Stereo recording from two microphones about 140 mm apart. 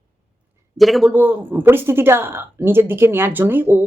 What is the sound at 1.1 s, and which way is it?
Speech, 15° right (ahead or behind).